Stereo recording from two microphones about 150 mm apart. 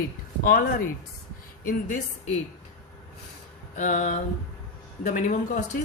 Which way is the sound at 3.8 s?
55° left (ahead or behind).